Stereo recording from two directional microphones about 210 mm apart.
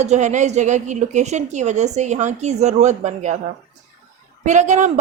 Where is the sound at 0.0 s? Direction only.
35° right (ahead or behind).